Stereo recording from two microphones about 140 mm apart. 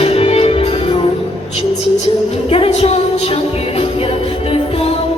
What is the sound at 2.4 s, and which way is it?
Music, 45° left (ahead or behind).